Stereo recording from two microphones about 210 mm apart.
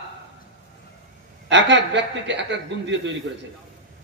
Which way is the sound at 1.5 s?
60° right (ahead or behind).